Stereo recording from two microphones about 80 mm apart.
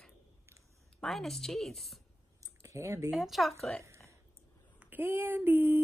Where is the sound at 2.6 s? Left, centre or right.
Right.